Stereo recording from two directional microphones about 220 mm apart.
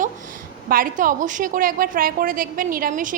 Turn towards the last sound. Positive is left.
turn(degrees=-40)  # may be behind; listen again after turning